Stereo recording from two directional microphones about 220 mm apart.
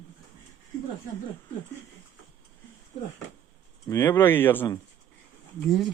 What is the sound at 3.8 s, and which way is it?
Speech, 10° left (ahead or behind).